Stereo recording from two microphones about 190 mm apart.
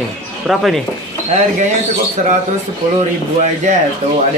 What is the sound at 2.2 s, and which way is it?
Speech, 40° right (ahead or behind).